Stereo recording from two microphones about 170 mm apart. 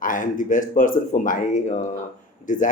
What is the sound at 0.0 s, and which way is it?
Speech, 50° left (ahead or behind).